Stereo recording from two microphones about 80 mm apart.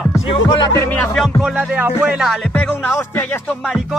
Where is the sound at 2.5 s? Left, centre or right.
Left.